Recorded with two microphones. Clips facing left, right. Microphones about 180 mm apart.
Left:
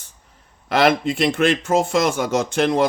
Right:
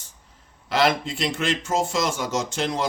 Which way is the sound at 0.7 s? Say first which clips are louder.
Left 5 dB; 55° left (ahead or behind).